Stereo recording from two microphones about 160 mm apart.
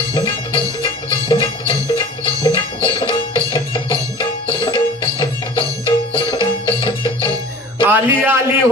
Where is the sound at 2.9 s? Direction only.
30° left (ahead or behind).